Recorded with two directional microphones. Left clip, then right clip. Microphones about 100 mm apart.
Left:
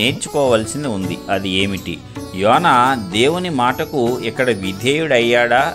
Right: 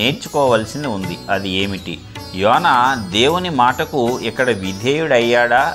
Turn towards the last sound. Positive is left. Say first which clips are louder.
# even
turn(degrees=65)  # may be behind; listen again after turning